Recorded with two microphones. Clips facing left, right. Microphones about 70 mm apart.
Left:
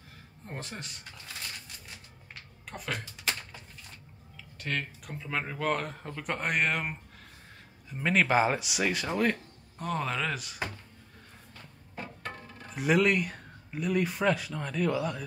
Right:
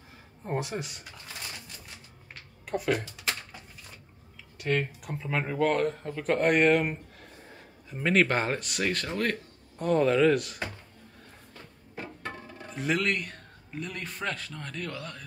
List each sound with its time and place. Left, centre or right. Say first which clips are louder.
0.6 s speech: right 7 dB; centre
2.6 s speech: right 9 dB; centre
4.6 s speech: right 6 dB; centre
11.9 s music: right 2 dB; centre
12.7 s speech: left 3 dB; centre